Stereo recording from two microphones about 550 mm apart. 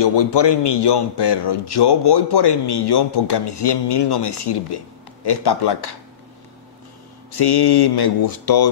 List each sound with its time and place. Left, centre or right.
0.0 s a man's voice: left
7.3 s a man's voice: left